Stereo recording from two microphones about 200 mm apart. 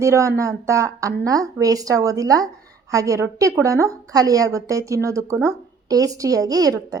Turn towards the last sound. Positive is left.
turn(degrees=-20)  # may be behind; listen again after turning